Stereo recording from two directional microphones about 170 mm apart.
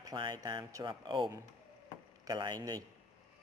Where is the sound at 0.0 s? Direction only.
25° right (ahead or behind).